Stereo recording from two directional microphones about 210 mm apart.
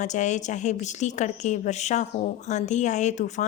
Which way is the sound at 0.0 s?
35° left (ahead or behind).